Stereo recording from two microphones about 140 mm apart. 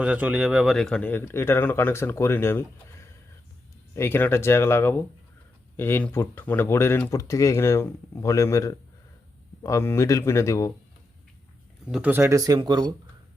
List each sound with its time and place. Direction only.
0.0 s speech: 10° right (ahead or behind); by 2.6 s 15° left (ahead or behind)
3.9 s speech: 15° left (ahead or behind)
11.9 s speech: 5° right (ahead or behind)
12.1 s speech: 20° right (ahead or behind)